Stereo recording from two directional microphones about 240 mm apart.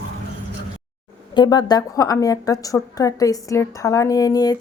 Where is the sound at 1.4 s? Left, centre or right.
Centre.